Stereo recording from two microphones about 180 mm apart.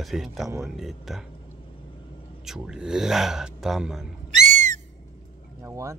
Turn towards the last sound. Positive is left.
turn(degrees=-15)  # may be behind; listen again after turning